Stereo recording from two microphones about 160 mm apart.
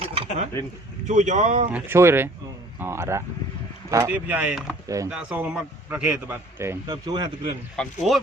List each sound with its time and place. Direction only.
0.0 s a sound: 40° right (ahead or behind)
1.0 s speech: 50° right (ahead or behind)
1.7 s a man's voice: 15° right (ahead or behind)
7.8 s speech: centre (ahead or behind)